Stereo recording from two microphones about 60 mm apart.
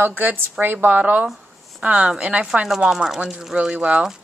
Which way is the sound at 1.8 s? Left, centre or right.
Centre.